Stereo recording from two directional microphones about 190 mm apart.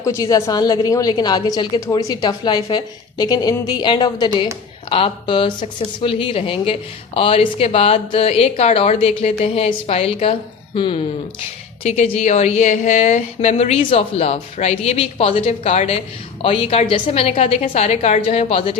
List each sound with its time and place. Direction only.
0.0 s a woman's voice: 15° left (ahead or behind)